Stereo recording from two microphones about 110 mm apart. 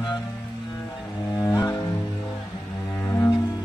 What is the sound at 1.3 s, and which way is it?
Music, 30° left (ahead or behind).